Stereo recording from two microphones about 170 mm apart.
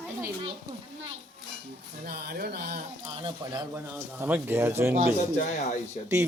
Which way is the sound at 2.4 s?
65° right (ahead or behind).